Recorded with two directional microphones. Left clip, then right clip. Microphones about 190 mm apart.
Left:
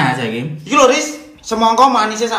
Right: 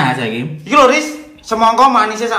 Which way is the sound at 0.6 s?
15° left (ahead or behind).